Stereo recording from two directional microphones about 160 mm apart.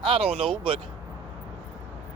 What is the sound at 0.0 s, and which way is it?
Speech, 35° right (ahead or behind).